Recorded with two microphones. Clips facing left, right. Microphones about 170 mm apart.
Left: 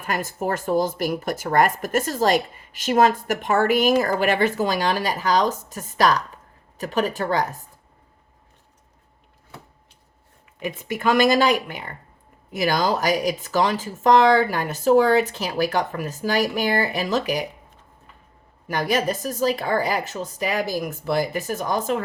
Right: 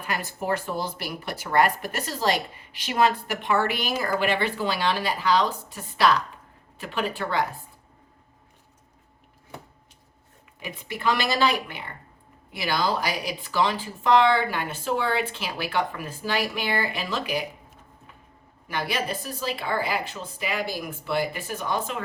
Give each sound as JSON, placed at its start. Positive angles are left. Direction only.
{"t": 0.1, "sound": "speech", "side_deg": 45}
{"t": 10.8, "sound": "speech", "side_deg": 45}
{"t": 18.7, "sound": "speech", "side_deg": 45}